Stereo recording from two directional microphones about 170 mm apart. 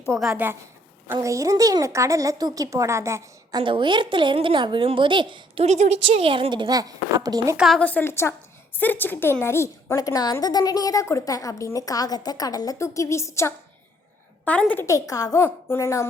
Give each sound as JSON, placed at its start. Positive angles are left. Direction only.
{"t": 0.1, "sound": "a woman's voice", "side_deg": 0}
{"t": 1.0, "sound": "a woman's voice", "side_deg": -15}
{"t": 3.6, "sound": "a woman's voice", "side_deg": -30}
{"t": 5.6, "sound": "a woman's voice", "side_deg": -40}
{"t": 7.5, "sound": "a woman's voice", "side_deg": -5}
{"t": 7.8, "sound": "a woman's voice", "side_deg": 10}